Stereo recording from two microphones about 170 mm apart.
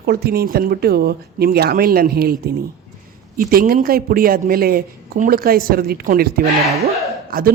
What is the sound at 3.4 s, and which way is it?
Speech, 60° right (ahead or behind).